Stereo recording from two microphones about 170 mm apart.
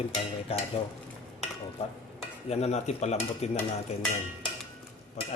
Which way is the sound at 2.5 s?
40° left (ahead or behind).